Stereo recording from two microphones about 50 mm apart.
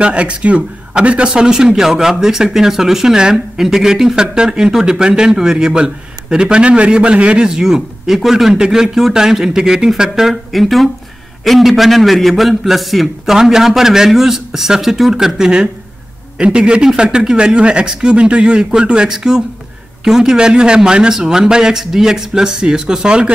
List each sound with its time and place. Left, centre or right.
0.0 s a man's voice: right